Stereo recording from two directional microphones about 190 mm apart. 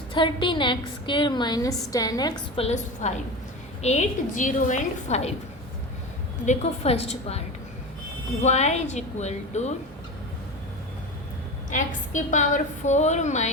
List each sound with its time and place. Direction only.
0.1 s a woman's voice: 25° left (ahead or behind)
2.6 s a woman's voice: 35° left (ahead or behind)
6.4 s a woman's voice: 35° left (ahead or behind)
11.7 s a woman's voice: 40° left (ahead or behind)